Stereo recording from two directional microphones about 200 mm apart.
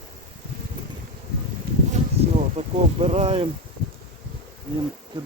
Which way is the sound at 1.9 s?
30° right (ahead or behind).